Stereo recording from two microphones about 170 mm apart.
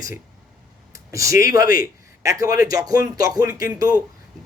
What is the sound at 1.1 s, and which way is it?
A man's voice, 20° right (ahead or behind).